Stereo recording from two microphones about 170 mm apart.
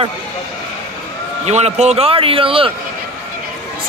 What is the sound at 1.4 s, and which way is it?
Speech, 40° right (ahead or behind).